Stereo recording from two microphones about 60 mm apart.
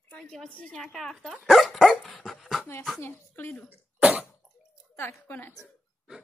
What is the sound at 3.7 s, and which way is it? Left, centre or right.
Speech, right.